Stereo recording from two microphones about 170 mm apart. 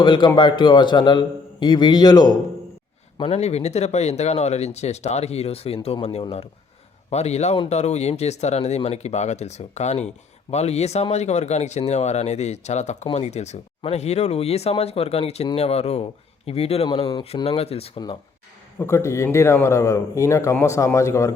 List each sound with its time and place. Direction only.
0.0 s a man's voice: 25° left (ahead or behind)
3.2 s speech: 35° left (ahead or behind)
18.8 s a man's voice: 15° left (ahead or behind)